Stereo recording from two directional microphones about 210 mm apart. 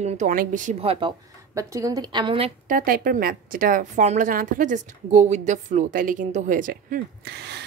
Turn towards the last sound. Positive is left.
turn(degrees=-50)  # may be behind; listen again after turning